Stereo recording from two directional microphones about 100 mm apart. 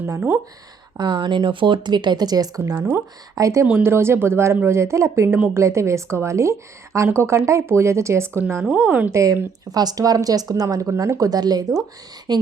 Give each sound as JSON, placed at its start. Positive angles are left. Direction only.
{"t": 0.0, "sound": "a woman's voice", "side_deg": -25}
{"t": 0.9, "sound": "speech", "side_deg": -50}
{"t": 2.7, "sound": "a woman's voice", "side_deg": -20}
{"t": 3.3, "sound": "speech", "side_deg": -30}
{"t": 3.7, "sound": "a woman's voice", "side_deg": -20}
{"t": 8.6, "sound": "speech", "side_deg": -10}
{"t": 9.1, "sound": "speech", "side_deg": -30}